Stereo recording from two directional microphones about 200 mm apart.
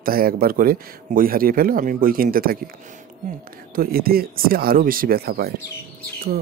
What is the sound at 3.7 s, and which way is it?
Speech, 50° right (ahead or behind).